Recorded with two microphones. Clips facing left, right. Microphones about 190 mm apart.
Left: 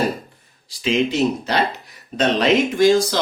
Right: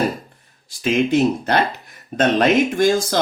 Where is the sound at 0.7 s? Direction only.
50° right (ahead or behind).